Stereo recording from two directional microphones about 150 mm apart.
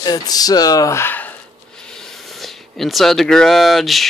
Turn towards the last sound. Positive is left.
turn(degrees=0)  # may be behind; listen again after turning